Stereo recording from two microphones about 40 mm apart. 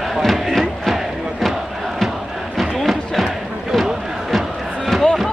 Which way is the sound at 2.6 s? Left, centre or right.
Centre.